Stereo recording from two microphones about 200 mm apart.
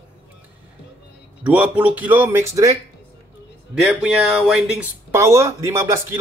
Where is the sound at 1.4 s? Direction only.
5° right (ahead or behind).